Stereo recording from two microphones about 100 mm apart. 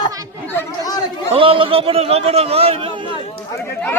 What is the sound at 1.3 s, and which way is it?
A man's voice, 65° right (ahead or behind).